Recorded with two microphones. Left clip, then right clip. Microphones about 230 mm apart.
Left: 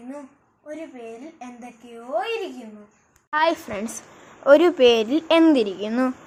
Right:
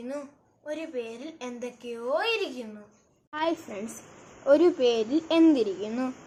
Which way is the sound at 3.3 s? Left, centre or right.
Left.